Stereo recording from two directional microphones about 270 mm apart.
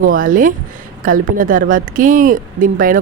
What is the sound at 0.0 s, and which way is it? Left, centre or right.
Speech, right.